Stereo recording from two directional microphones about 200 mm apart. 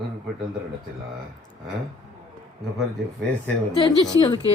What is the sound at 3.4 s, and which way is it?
A woman's voice, 20° left (ahead or behind).